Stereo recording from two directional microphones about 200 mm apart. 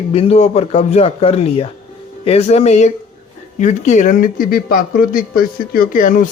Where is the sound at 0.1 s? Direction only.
30° left (ahead or behind).